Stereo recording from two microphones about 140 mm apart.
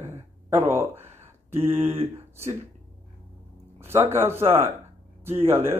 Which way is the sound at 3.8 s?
15° right (ahead or behind).